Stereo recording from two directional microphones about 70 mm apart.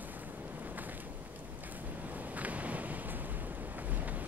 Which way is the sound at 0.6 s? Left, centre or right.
Right.